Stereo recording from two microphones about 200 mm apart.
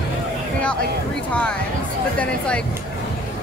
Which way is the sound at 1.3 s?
5° left (ahead or behind).